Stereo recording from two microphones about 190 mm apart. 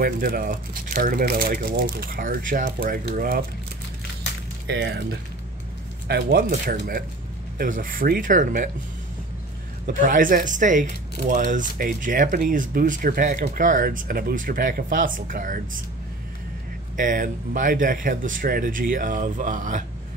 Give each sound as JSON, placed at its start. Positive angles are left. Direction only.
{"t": 0.0, "sound": "speech", "side_deg": -50}
{"t": 4.6, "sound": "speech", "side_deg": -60}
{"t": 6.0, "sound": "speech", "side_deg": -55}
{"t": 9.9, "sound": "speech", "side_deg": -45}
{"t": 16.9, "sound": "speech", "side_deg": -45}